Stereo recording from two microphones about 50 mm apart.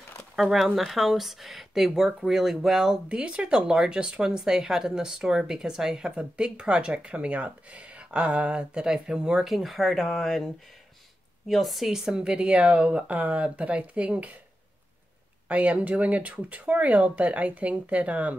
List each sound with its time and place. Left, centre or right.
0.4 s speech: centre
3.1 s speech: right
9.5 s speech: centre
11.9 s speech: centre
15.4 s speech: right